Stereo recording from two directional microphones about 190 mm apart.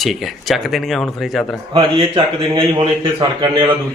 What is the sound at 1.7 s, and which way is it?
A man's voice, 25° right (ahead or behind).